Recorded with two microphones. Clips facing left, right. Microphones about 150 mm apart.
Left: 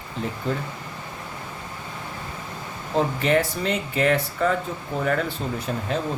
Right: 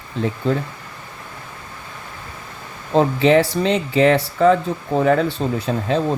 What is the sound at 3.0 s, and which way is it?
Speech, 90° right.